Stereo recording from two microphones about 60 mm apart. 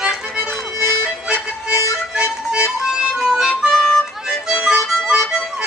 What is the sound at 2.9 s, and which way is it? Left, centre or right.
Music, centre.